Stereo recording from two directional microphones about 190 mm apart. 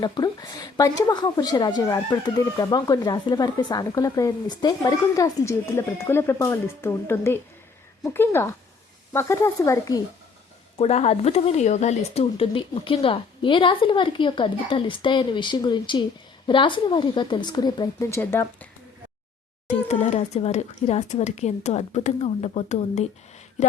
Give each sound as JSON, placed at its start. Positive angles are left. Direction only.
{"t": 0.0, "sound": "a woman's voice", "side_deg": 20}
{"t": 10.8, "sound": "a woman's voice", "side_deg": 35}
{"t": 19.9, "sound": "a woman's voice", "side_deg": 35}